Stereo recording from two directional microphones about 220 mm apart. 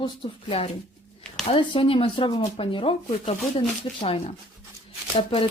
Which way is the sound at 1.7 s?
25° left (ahead or behind).